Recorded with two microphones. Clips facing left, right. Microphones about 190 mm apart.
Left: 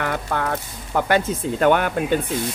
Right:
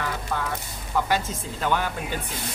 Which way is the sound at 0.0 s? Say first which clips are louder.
Left 5 dB; 60° left (ahead or behind).